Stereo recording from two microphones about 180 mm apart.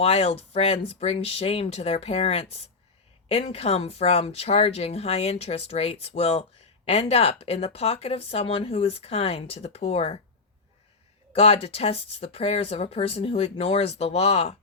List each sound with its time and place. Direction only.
0.0 s speech: 35° left (ahead or behind)
11.3 s speech: 35° left (ahead or behind)